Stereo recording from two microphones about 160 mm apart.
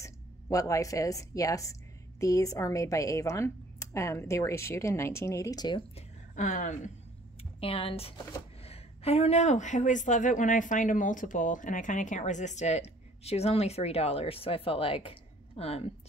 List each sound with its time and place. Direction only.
0.0 s a woman's voice: 20° left (ahead or behind)
5.9 s a sound: 50° left (ahead or behind)
7.6 s a woman's voice: 35° left (ahead or behind)